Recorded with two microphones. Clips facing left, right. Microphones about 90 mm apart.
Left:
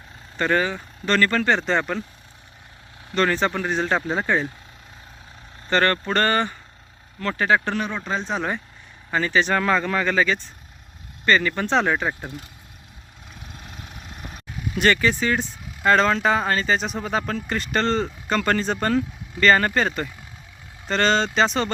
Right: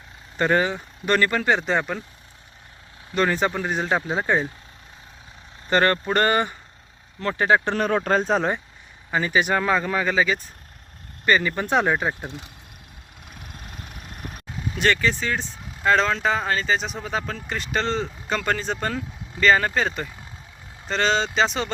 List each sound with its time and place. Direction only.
0.3 s speech: 25° right (ahead or behind); by 2.0 s 5° right (ahead or behind)
3.2 s speech: 10° right (ahead or behind)
5.6 s speech: 20° right (ahead or behind)
7.8 s speech: 50° right (ahead or behind)
9.1 s speech: 15° right (ahead or behind)
14.8 s speech: 5° left (ahead or behind)